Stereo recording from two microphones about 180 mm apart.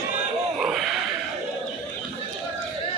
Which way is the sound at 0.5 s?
Centre (ahead or behind).